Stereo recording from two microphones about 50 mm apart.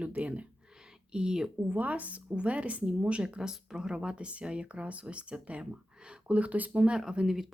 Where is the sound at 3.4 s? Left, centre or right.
Centre.